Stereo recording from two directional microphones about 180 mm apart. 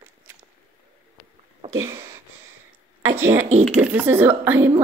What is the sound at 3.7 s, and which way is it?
Speech, 10° right (ahead or behind).